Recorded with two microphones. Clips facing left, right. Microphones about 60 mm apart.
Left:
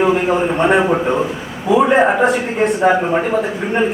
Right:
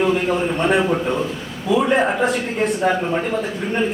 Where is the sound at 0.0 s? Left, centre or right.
Centre.